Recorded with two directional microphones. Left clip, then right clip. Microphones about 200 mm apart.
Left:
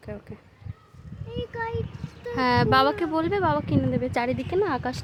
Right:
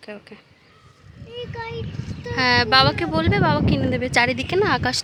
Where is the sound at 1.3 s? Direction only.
55° left (ahead or behind).